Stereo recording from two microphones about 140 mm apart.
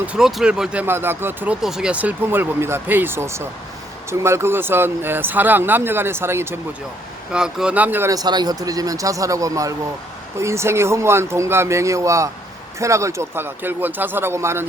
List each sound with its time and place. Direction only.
0.0 s speech: 5° right (ahead or behind)
7.3 s speech: 5° right (ahead or behind)